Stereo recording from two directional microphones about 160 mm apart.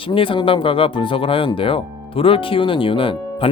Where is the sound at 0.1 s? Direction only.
35° left (ahead or behind).